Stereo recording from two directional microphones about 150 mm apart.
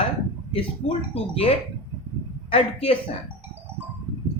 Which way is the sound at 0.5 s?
40° left (ahead or behind).